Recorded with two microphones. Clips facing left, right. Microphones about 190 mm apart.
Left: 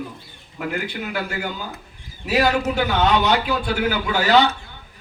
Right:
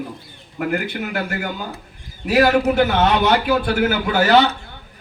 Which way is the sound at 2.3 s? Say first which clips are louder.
Right 5 dB; 55° right (ahead or behind).